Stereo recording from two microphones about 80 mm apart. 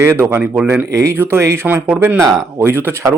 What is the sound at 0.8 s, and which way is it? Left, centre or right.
Speech, right.